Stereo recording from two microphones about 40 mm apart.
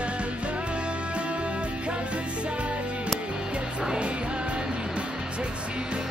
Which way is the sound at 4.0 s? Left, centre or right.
Right.